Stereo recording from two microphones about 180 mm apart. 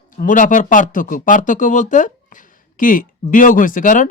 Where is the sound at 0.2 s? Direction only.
45° left (ahead or behind).